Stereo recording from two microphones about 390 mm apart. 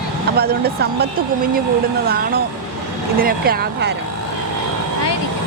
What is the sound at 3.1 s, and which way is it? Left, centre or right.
Speech, right.